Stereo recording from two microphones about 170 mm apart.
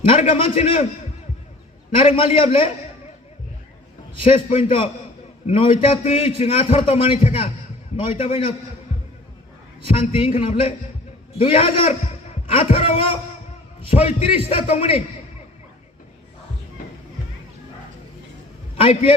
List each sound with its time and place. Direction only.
0.2 s a man's voice: 30° left (ahead or behind)
2.0 s a man's voice: 30° left (ahead or behind)
4.2 s a man's voice: 35° left (ahead or behind)
9.9 s a man's voice: 35° left (ahead or behind)
18.8 s a man's voice: 35° left (ahead or behind)